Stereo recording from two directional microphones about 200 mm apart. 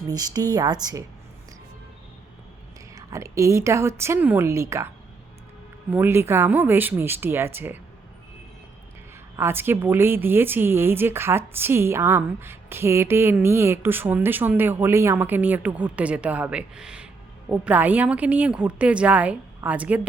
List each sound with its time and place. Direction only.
0.1 s speech: 20° right (ahead or behind)
2.9 s a woman's voice: 15° right (ahead or behind)
5.9 s a woman's voice: 10° right (ahead or behind)
9.3 s a woman's voice: 10° right (ahead or behind)